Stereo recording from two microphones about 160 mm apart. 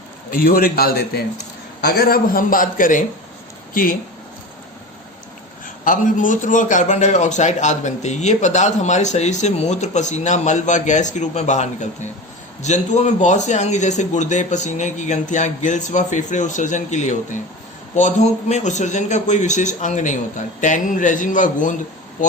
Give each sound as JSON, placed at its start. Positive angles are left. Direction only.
{"t": 0.3, "sound": "a man's voice", "side_deg": 65}
{"t": 5.6, "sound": "a man's voice", "side_deg": 55}